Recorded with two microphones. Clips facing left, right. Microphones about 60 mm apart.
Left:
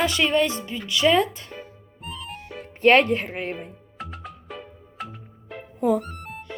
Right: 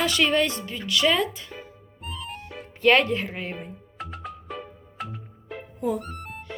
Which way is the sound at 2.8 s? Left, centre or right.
Left.